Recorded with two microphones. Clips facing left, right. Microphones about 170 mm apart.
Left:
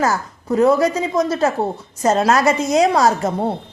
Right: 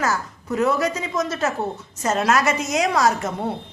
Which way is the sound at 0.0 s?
35° left (ahead or behind).